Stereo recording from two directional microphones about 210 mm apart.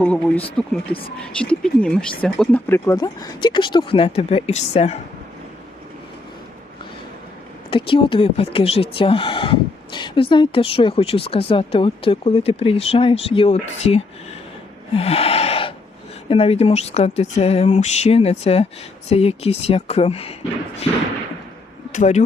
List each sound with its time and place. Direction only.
0.0 s speech: 5° left (ahead or behind); by 4.9 s 30° left (ahead or behind)
7.7 s speech: 25° left (ahead or behind)
14.9 s a sound: 30° left (ahead or behind)
16.3 s speech: 30° left (ahead or behind)
21.9 s speech: 35° left (ahead or behind)